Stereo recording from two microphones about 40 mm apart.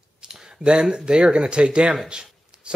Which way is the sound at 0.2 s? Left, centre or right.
Centre.